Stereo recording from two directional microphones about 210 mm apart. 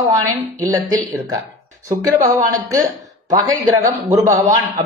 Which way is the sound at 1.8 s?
15° right (ahead or behind).